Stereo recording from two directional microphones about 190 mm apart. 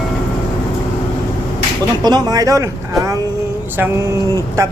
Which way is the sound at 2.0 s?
20° right (ahead or behind).